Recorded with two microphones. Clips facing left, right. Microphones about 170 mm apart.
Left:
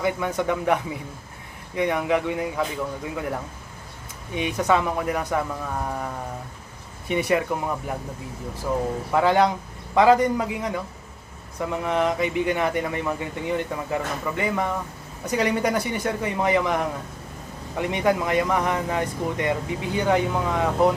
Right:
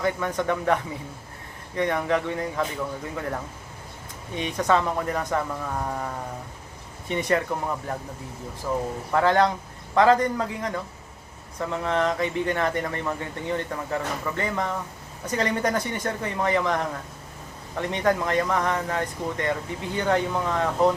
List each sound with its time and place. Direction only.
0.0 s speech: 10° left (ahead or behind)
9.1 s speech: 10° left (ahead or behind)